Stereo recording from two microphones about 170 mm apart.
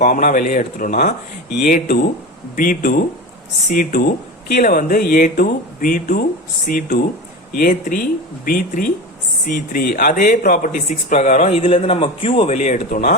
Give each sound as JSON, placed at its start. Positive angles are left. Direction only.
{"t": 0.0, "sound": "speech", "side_deg": 50}